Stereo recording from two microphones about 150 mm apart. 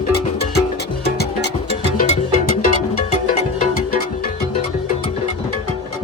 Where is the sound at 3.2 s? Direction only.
60° left (ahead or behind).